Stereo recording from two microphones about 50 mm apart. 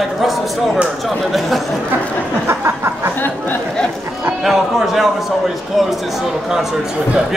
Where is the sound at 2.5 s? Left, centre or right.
Right.